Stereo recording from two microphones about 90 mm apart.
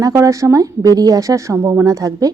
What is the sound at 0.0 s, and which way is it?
A woman's voice, 35° right (ahead or behind).